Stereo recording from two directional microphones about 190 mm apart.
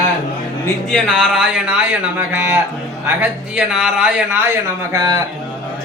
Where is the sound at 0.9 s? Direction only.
Centre (ahead or behind).